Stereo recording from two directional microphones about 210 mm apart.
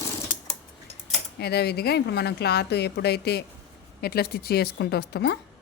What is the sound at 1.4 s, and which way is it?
A woman's voice, 50° left (ahead or behind).